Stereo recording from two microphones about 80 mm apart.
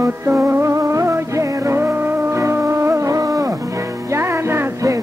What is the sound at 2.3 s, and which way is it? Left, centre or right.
Music, right.